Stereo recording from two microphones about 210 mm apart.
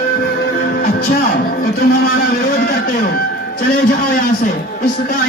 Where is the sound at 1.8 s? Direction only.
45° left (ahead or behind).